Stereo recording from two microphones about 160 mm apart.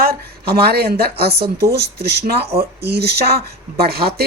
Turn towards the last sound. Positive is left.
turn(degrees=-80)